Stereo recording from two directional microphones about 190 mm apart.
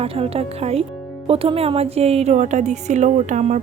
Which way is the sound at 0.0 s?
30° right (ahead or behind).